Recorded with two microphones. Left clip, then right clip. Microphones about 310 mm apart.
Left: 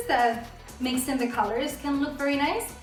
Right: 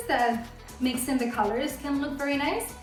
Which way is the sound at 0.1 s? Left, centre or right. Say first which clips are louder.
Left 2 dB; centre.